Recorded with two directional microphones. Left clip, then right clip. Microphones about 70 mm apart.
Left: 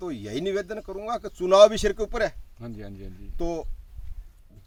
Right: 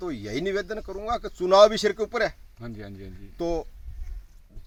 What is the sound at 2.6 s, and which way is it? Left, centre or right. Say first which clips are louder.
Speech: even; left.